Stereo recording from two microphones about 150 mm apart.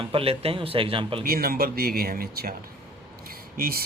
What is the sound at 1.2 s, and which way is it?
Speech, 90° right.